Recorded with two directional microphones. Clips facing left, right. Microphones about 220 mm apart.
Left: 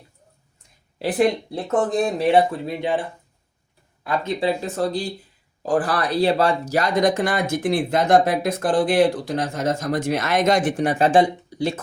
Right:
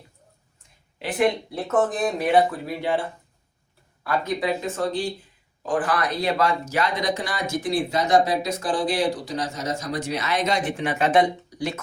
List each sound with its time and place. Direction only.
1.6 s speech: 30° left (ahead or behind)
4.0 s speech: 25° left (ahead or behind)